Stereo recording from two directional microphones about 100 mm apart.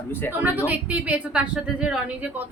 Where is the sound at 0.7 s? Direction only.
15° right (ahead or behind).